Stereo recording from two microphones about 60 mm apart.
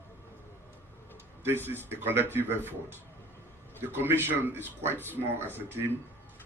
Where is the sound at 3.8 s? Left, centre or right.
Right.